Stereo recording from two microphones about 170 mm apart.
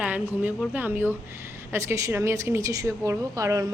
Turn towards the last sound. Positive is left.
turn(degrees=-15)  # may be behind; listen again after turning